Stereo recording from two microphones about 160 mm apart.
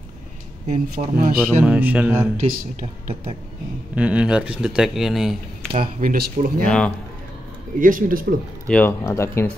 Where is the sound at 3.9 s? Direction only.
10° right (ahead or behind).